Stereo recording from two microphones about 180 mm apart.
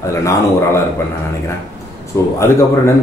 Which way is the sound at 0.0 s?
15° left (ahead or behind).